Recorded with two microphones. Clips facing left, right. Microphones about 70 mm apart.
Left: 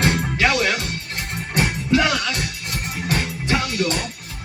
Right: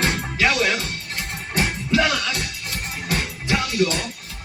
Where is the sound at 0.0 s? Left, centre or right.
Left.